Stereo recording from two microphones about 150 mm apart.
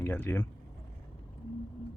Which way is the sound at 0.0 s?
15° left (ahead or behind).